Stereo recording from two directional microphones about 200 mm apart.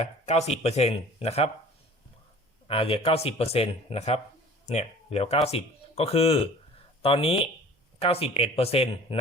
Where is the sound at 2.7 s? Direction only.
30° left (ahead or behind).